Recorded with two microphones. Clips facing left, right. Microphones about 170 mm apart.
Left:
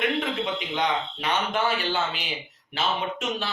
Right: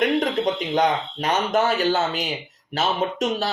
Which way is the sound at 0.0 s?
40° right (ahead or behind).